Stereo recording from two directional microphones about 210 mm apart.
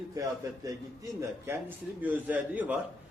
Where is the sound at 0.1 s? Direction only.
15° right (ahead or behind).